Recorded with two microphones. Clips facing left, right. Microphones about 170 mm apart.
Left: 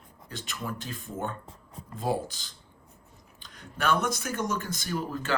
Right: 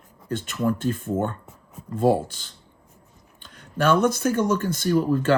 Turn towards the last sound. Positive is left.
turn(degrees=-50)  # may be behind; listen again after turning